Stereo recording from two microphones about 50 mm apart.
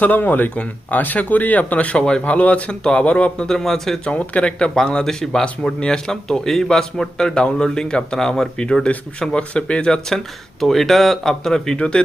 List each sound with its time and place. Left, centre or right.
0.0 s speech: left; by 3.9 s centre
4.0 s a man's voice: left
11.8 s speech: left